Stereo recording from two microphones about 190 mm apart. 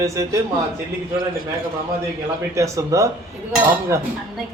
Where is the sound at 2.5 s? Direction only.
15° right (ahead or behind).